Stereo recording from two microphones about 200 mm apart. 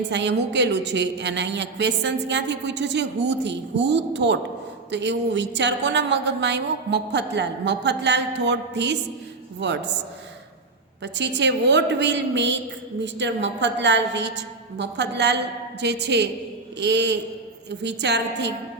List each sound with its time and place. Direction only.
0.1 s a woman's voice: 60° right (ahead or behind)
11.0 s a woman's voice: 60° right (ahead or behind)